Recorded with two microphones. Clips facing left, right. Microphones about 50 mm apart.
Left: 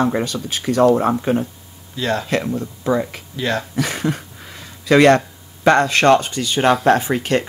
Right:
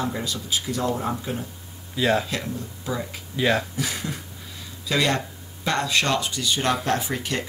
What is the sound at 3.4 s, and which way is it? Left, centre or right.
Speech, centre.